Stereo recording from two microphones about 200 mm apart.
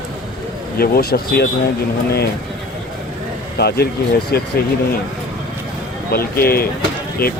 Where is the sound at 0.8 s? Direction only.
50° left (ahead or behind).